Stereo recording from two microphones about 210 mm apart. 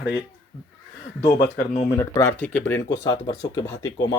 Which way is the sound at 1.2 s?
20° left (ahead or behind).